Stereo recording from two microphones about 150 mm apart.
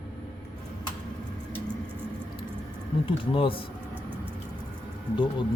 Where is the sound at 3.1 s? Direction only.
35° left (ahead or behind).